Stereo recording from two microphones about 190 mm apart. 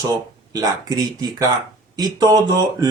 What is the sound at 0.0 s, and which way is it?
Speech, 20° right (ahead or behind).